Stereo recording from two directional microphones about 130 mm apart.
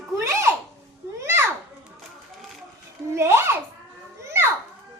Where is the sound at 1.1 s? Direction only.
20° right (ahead or behind).